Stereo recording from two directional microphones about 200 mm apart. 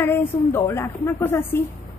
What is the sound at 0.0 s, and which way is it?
Speech, 10° left (ahead or behind).